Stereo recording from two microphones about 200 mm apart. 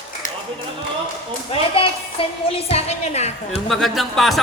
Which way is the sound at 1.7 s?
25° left (ahead or behind).